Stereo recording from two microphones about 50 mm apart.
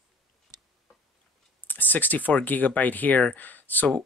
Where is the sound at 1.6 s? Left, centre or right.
Left.